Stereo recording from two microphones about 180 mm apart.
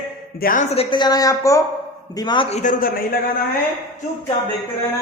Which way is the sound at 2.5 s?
45° left (ahead or behind).